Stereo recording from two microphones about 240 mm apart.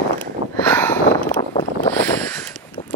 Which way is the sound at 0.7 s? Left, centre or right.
Centre.